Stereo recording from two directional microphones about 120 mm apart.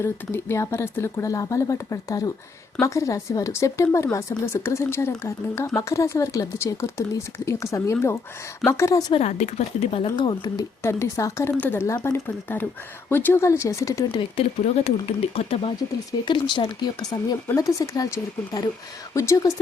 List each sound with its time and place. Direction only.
0.0 s speech: 20° left (ahead or behind)
9.1 s speech: 65° left (ahead or behind)
10.2 s speech: 40° left (ahead or behind)
10.8 s speech: 25° left (ahead or behind)
14.1 s speech: 45° left (ahead or behind)
14.6 s speech: 60° left (ahead or behind)
16.2 s speech: 40° left (ahead or behind); by 19.5 s 25° left (ahead or behind)